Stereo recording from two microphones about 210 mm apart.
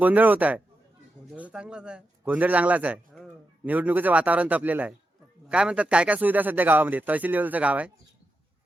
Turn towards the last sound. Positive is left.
turn(degrees=-5)  # may be behind; listen again after turning